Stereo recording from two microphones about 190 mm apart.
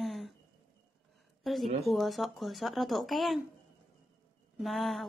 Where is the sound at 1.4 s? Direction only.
Centre (ahead or behind).